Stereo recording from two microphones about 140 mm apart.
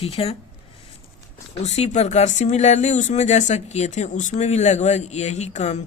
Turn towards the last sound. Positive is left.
turn(degrees=55)  # may be behind; listen again after turning